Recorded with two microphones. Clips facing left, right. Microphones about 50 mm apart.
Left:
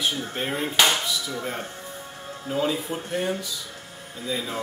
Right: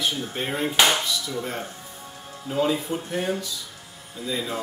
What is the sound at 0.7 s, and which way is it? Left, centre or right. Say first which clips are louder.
Music: right 1 dB; centre.